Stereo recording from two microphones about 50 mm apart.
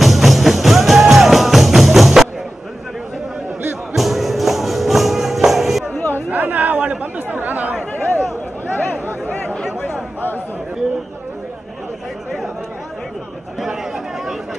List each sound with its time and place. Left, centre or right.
0.0 s music: centre
3.9 s music: centre
5.9 s chatter: left
6.3 s chatter: right
7.9 s chatter: left
13.6 s chatter: centre